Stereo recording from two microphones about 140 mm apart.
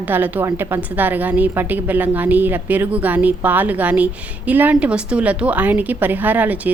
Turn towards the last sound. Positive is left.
turn(degrees=-10)  # may be behind; listen again after turning